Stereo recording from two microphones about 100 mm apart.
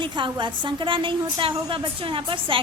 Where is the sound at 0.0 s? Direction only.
50° right (ahead or behind).